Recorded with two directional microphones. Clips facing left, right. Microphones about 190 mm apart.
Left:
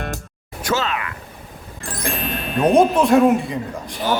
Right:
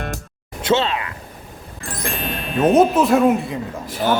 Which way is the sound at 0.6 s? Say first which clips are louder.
Right 4 dB; 25° right (ahead or behind).